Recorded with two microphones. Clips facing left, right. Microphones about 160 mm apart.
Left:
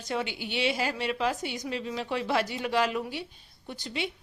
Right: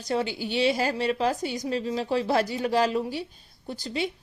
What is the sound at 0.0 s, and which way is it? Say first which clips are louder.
Speech: right 5 dB; 35° right (ahead or behind).